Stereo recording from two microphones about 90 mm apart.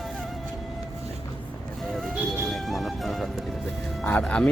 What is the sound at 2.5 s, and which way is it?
Music, centre (ahead or behind).